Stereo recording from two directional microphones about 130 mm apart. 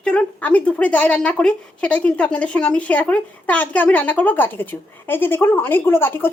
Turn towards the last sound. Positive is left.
turn(degrees=15)  # may be behind; listen again after turning